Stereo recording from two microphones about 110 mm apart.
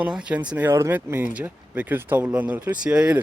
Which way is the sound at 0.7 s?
25° right (ahead or behind).